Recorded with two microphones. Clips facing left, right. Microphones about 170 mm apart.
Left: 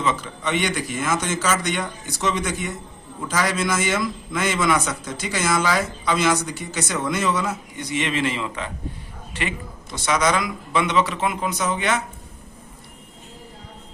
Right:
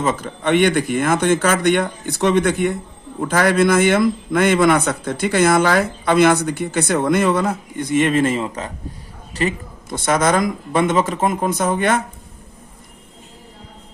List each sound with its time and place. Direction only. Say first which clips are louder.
0.0 s a man's voice: right 4 dB; 50° right (ahead or behind)